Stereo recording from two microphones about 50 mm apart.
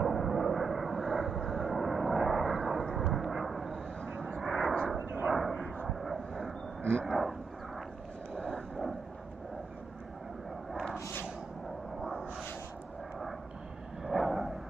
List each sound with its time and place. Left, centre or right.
0.0 s vehicle: centre
3.0 s a sound: centre
4.0 s vehicle: centre
4.4 s vehicle: centre
6.8 s vehicle: right
7.1 s vehicle: centre
8.4 s vehicle: centre
12.0 s a sound: centre
14.0 s vehicle: centre